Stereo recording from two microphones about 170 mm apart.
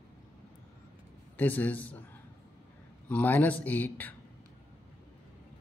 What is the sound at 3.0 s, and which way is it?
Speech, 10° left (ahead or behind).